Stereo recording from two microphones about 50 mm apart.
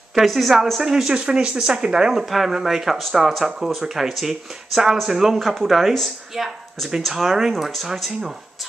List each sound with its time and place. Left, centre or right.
0.1 s speech: centre
2.2 s speech: centre